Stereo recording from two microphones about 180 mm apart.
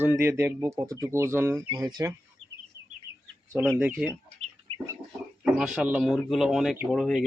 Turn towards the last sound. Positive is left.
turn(degrees=0)  # may be behind; listen again after turning